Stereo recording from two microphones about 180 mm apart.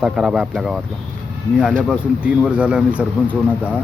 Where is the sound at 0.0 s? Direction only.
5° right (ahead or behind).